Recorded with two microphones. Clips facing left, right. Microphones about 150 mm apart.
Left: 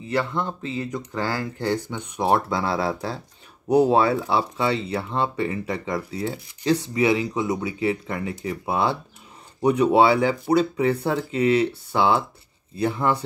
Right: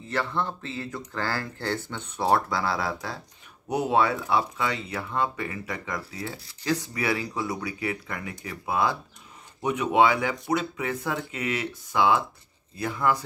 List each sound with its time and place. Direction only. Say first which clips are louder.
0.1 s speech: left 4 dB; 15° left (ahead or behind); by 13.2 s 30° left (ahead or behind)